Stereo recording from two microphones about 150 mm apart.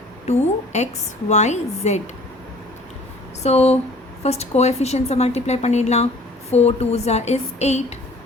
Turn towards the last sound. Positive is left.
turn(degrees=45)  # may be behind; listen again after turning